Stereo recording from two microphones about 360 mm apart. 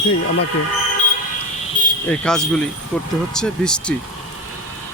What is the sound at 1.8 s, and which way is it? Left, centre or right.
Cricket, left.